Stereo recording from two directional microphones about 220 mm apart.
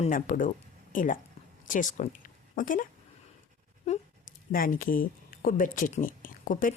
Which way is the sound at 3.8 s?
35° left (ahead or behind).